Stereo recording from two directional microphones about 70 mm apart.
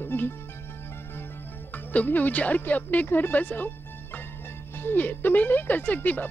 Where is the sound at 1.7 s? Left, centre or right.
Left.